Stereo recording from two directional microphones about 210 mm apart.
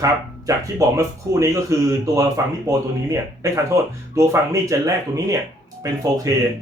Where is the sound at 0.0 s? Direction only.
15° right (ahead or behind).